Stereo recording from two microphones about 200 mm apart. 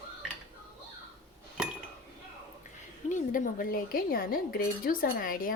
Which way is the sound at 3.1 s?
40° left (ahead or behind).